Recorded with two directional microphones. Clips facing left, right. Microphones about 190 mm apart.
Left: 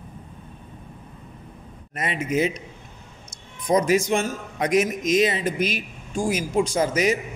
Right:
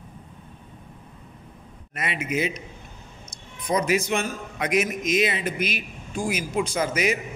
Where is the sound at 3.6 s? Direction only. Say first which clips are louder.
Left 4 dB; 45° left (ahead or behind).